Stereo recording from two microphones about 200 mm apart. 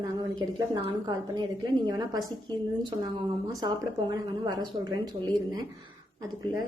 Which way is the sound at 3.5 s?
20° right (ahead or behind).